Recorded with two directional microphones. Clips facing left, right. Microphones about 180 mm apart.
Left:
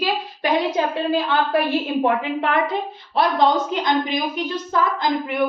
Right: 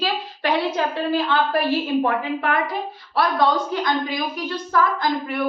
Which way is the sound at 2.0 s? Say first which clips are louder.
Left 2 dB; 25° left (ahead or behind).